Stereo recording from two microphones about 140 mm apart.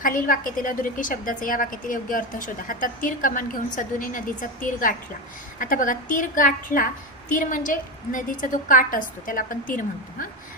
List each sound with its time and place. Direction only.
0.0 s a woman's voice: 75° left (ahead or behind)